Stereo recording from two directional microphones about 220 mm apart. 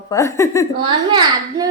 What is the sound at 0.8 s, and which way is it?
Speech, 20° right (ahead or behind).